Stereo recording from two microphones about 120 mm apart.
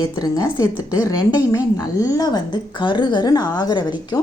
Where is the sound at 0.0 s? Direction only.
30° left (ahead or behind).